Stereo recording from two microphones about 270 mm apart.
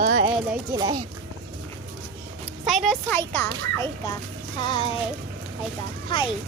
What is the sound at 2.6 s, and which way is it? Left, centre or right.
Speech, centre.